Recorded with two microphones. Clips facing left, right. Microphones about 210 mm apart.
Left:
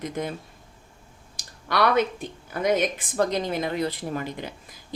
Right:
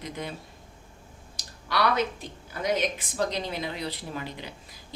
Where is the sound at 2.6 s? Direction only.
50° left (ahead or behind).